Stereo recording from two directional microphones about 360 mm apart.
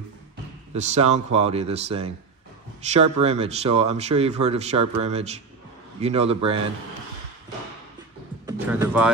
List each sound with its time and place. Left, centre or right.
0.7 s speech: centre
8.5 s speech: centre